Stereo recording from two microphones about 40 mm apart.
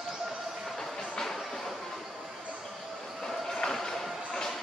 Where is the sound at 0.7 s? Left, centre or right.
Centre.